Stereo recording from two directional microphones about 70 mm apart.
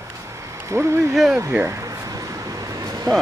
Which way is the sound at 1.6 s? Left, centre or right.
Right.